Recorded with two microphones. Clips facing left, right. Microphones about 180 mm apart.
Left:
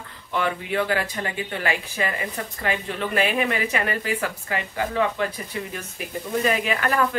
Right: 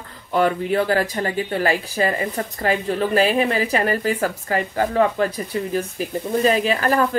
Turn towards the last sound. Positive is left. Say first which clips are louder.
# right 4 dB
turn(degrees=-35)  # may be behind; listen again after turning